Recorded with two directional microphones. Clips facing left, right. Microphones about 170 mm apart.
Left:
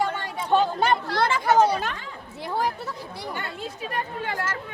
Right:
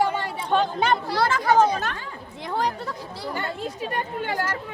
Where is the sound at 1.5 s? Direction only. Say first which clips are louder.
Even; 10° left (ahead or behind).